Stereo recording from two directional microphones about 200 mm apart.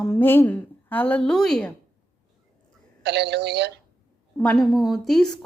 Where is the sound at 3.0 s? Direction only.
55° right (ahead or behind).